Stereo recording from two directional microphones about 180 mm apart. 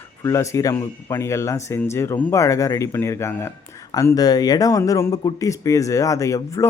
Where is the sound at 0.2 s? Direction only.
15° left (ahead or behind).